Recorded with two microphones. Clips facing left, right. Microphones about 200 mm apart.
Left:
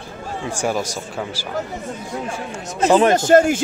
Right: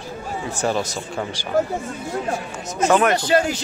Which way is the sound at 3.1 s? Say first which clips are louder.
Left 6 dB; 45° left (ahead or behind).